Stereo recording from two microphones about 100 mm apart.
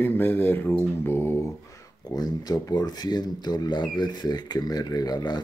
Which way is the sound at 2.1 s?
40° left (ahead or behind).